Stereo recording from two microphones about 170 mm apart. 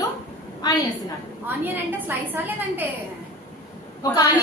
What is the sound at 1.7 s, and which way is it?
A woman's voice, 10° right (ahead or behind).